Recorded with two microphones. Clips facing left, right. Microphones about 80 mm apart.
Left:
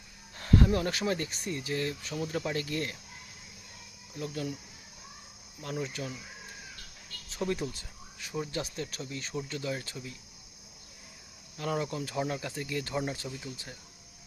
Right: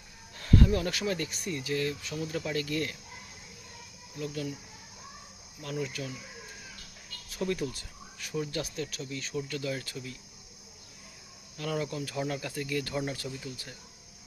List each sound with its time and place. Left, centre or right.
0.3 s speech: left
4.2 s speech: left
5.6 s speech: left
7.3 s cricket: left
8.5 s speech: left
11.5 s speech: left